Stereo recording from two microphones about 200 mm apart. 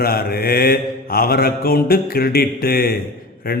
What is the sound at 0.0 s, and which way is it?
Mantra, 50° left (ahead or behind).